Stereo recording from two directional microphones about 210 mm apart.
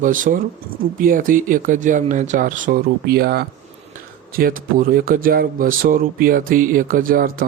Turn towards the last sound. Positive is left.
turn(degrees=-40)  # may be behind; listen again after turning